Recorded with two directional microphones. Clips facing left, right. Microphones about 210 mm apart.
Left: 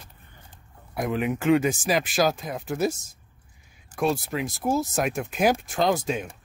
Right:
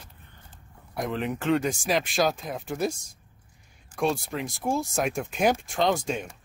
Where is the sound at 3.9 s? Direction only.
5° left (ahead or behind).